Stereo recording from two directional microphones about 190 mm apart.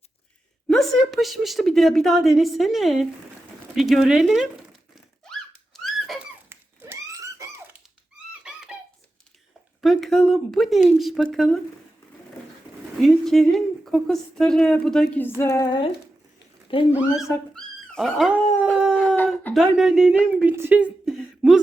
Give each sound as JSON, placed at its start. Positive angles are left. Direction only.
{"t": 0.7, "sound": "a woman's voice", "side_deg": 0}
{"t": 5.2, "sound": "dog", "side_deg": 5}
{"t": 6.5, "sound": "a sound", "side_deg": -10}
{"t": 9.8, "sound": "a woman's voice", "side_deg": 0}
{"t": 13.0, "sound": "a woman's voice", "side_deg": 0}
{"t": 15.4, "sound": "a sound", "side_deg": 15}
{"t": 16.9, "sound": "speech", "side_deg": -5}
{"t": 17.5, "sound": "dog", "side_deg": 5}
{"t": 18.9, "sound": "a sound", "side_deg": 10}
{"t": 19.5, "sound": "speech", "side_deg": -5}